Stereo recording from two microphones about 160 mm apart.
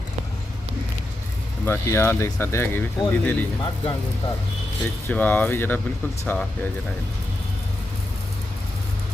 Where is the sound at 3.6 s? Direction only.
30° left (ahead or behind).